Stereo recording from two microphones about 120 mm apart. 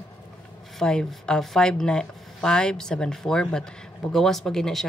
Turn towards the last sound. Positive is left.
turn(degrees=5)  # may be behind; listen again after turning